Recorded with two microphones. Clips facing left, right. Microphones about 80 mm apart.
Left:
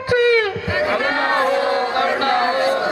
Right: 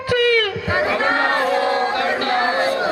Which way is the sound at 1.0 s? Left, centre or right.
Right.